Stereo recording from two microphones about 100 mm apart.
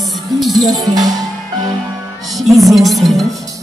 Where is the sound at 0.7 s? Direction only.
40° right (ahead or behind).